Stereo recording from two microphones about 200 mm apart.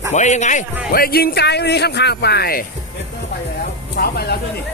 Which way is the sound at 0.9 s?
50° left (ahead or behind).